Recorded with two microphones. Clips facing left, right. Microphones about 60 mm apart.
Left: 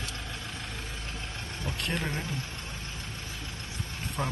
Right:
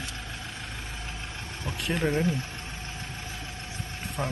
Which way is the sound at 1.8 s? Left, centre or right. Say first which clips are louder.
Right 7 dB; centre.